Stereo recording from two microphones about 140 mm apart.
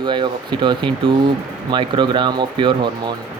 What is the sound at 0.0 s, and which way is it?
Speech, 35° right (ahead or behind).